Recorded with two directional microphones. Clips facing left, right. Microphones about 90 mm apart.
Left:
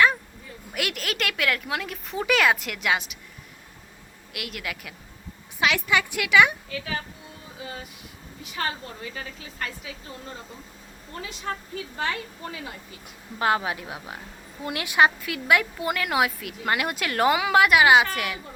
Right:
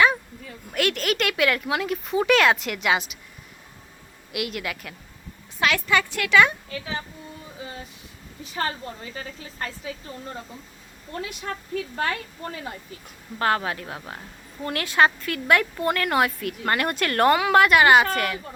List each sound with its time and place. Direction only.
0.7 s speech: 5° left (ahead or behind)
4.3 s speech: centre (ahead or behind)
5.5 s a child's voice: 15° left (ahead or behind)
6.7 s speech: 25° right (ahead or behind)
8.6 s a woman's voice: 30° right (ahead or behind)
11.3 s a woman's voice: 55° right (ahead or behind)
13.4 s a child's voice: 15° left (ahead or behind)